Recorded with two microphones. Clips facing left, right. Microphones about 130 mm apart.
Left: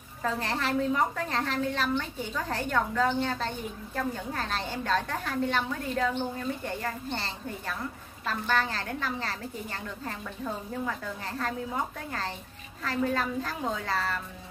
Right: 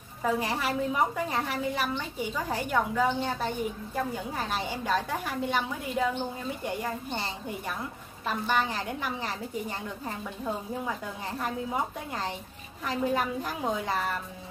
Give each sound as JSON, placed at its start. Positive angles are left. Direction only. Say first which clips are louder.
{"t": 0.2, "sound": "a woman's voice", "louder": "right 2 dB", "side_deg": -10}